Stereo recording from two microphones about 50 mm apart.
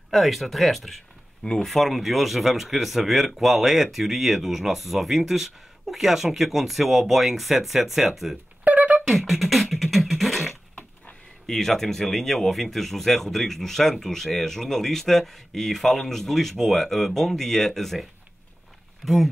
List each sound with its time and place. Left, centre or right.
0.1 s speech: centre
8.6 s beatboxing: right
9.0 s beatboxing: centre
11.4 s speech: centre
19.0 s speech: centre